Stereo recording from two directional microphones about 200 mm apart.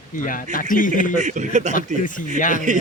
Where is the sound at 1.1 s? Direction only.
35° right (ahead or behind).